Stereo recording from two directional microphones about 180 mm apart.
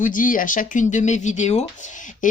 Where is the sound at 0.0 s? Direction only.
50° left (ahead or behind).